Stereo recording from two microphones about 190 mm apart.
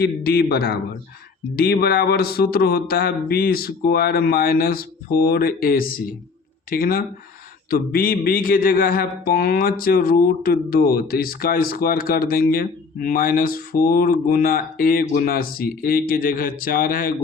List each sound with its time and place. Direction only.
0.0 s a man's voice: 55° left (ahead or behind)